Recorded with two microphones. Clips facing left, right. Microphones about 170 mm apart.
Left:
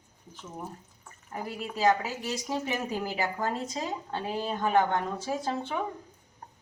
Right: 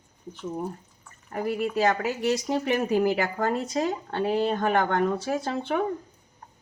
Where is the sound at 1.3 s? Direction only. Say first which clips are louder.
Right 9 dB; 65° right (ahead or behind).